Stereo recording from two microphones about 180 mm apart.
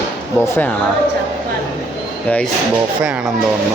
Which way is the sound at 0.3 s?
10° left (ahead or behind).